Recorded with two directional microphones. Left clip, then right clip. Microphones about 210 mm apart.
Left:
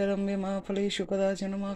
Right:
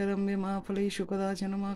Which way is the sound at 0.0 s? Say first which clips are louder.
Left 3 dB; 15° right (ahead or behind).